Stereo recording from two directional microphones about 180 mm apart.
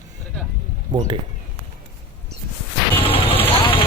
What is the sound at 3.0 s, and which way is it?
Vehicle, 30° left (ahead or behind).